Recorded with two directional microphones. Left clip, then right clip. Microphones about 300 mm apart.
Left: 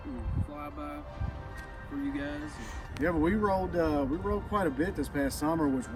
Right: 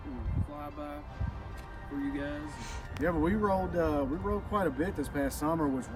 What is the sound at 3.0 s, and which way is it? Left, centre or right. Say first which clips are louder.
Speech: left 1 dB; centre.